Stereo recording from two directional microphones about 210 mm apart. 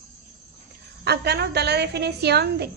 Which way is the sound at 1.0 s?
50° right (ahead or behind).